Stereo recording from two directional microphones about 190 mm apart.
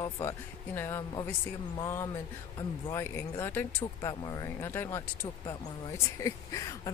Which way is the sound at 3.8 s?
25° left (ahead or behind).